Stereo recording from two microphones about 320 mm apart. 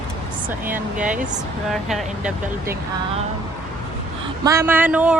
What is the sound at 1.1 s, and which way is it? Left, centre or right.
Speech, right.